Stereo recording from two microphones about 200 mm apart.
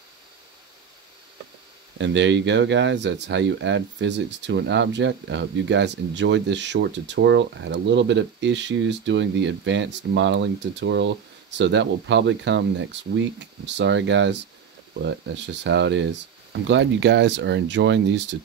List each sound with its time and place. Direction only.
2.0 s speech: 65° right (ahead or behind)